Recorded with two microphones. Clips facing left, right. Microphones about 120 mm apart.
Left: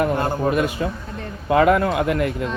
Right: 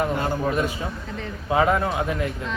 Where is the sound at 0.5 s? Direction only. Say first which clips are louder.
Left 4 dB; 65° left (ahead or behind).